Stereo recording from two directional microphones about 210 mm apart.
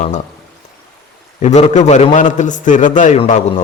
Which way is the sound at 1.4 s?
35° left (ahead or behind).